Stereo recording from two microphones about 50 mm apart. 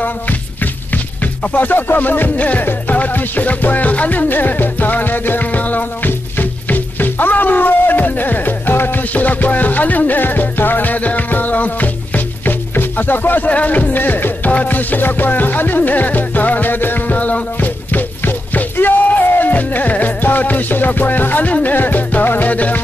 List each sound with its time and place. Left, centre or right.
1.6 s music: left